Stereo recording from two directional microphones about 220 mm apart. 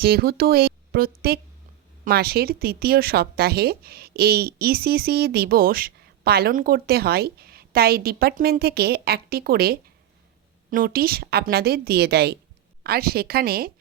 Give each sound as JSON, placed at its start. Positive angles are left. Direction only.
{"t": 0.0, "sound": "speech", "side_deg": -45}